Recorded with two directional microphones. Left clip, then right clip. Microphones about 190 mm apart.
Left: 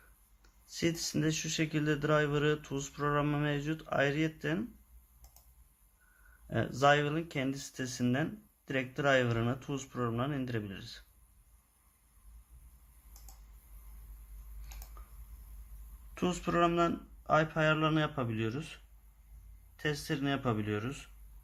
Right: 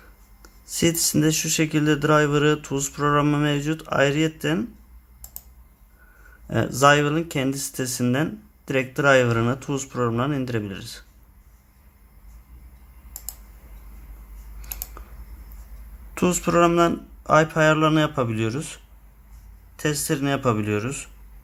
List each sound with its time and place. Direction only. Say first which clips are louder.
0.7 s speech: right 12 dB; 20° right (ahead or behind)
6.5 s speech: right 10 dB; 20° right (ahead or behind)
16.1 s speech: right 12 dB; 20° right (ahead or behind)